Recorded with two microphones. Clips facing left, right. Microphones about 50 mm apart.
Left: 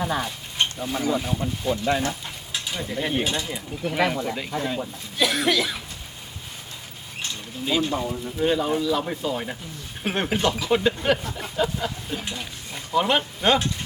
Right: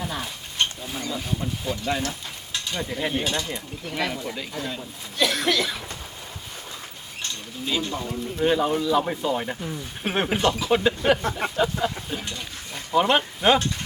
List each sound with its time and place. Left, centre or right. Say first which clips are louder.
0.0 s speech: left 5 dB; centre
0.6 s a sound: even; centre
1.2 s speech: left 2 dB; centre
1.7 s stir: left 4 dB; centre
3.1 s speech: left 1 dB; centre
7.2 s speech: left 1 dB; centre
8.4 s speech: right 1 dB; centre
11.2 s a sound: right 6 dB; right
11.5 s speech: left 2 dB; centre